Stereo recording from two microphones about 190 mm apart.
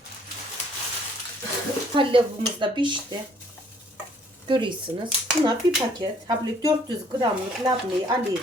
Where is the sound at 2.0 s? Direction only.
25° right (ahead or behind).